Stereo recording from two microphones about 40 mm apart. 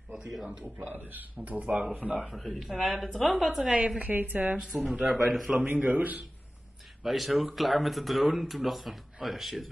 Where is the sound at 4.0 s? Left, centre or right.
Right.